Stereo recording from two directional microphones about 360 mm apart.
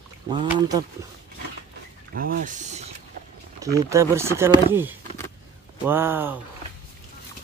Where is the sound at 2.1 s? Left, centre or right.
Right.